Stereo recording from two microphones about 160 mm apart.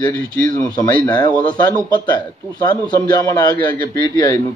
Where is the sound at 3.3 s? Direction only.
30° left (ahead or behind).